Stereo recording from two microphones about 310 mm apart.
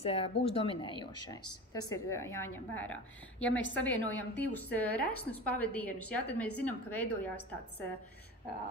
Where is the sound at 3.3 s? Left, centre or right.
Left.